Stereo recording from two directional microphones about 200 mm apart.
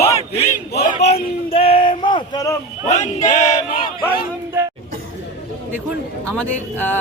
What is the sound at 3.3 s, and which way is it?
Male singing, 40° left (ahead or behind).